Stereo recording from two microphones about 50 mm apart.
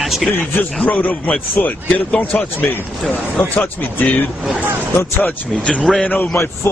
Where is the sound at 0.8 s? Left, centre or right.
Left.